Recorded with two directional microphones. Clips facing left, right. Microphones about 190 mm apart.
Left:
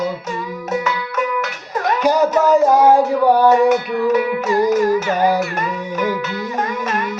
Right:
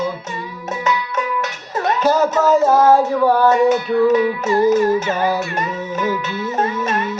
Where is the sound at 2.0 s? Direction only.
15° left (ahead or behind).